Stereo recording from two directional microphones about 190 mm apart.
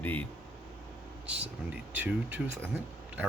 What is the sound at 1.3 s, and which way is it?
Speech, 5° right (ahead or behind).